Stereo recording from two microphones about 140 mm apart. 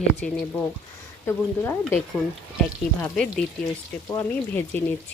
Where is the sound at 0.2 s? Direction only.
5° left (ahead or behind).